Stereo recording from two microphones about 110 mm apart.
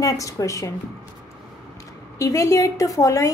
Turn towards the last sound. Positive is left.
turn(degrees=30)  # may be behind; listen again after turning